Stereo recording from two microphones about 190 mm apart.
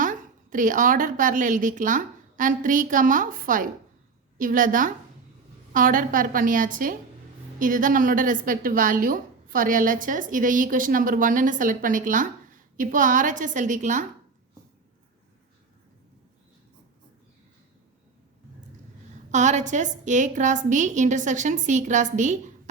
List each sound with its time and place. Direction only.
0.0 s a woman's voice: 45° right (ahead or behind)
19.3 s a woman's voice: 40° right (ahead or behind)